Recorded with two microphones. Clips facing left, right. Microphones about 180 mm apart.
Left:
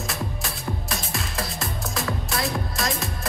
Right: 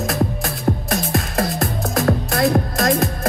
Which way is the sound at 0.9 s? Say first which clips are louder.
Right 10 dB; 55° right (ahead or behind).